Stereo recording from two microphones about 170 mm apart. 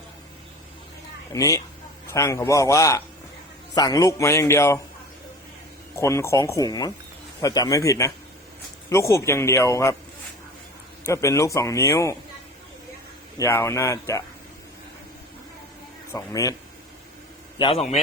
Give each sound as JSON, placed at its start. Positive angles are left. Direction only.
{"t": 1.3, "sound": "speech", "side_deg": 20}
{"t": 6.0, "sound": "speech", "side_deg": 15}
{"t": 11.0, "sound": "speech", "side_deg": 15}
{"t": 13.3, "sound": "speech", "side_deg": 15}
{"t": 16.1, "sound": "speech", "side_deg": 20}
{"t": 17.6, "sound": "a man's voice", "side_deg": 35}